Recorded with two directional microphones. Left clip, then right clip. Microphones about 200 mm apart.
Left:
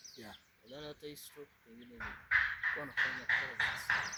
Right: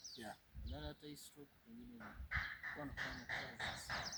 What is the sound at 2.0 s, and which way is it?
Speech, 60° right (ahead or behind).